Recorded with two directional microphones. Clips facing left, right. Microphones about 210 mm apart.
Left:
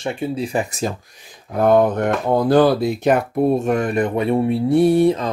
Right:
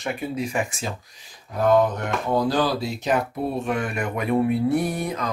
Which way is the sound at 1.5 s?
55° left (ahead or behind).